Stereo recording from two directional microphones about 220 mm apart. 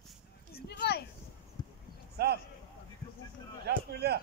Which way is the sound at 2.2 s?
45° right (ahead or behind).